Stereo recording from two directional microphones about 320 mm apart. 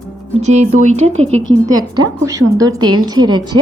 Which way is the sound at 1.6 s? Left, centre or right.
Centre.